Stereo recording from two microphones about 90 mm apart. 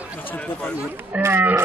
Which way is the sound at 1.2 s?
25° right (ahead or behind).